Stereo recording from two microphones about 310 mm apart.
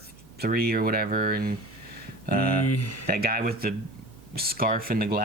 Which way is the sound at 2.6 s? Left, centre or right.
Left.